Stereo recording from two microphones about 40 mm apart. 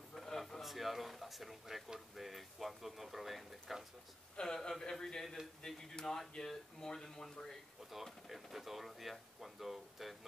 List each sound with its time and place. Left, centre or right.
0.1 s a sound: centre
0.6 s speech: centre
4.4 s speech: centre
7.9 s speech: centre